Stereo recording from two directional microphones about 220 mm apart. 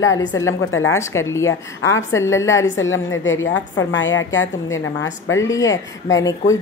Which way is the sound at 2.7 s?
60° left (ahead or behind).